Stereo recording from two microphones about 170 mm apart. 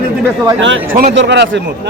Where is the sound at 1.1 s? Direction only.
90° right.